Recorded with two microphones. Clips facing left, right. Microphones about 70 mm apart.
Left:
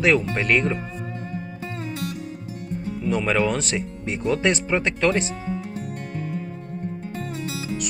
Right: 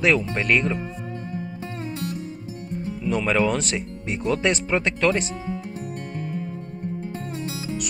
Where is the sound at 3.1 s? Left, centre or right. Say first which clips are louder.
Even; left.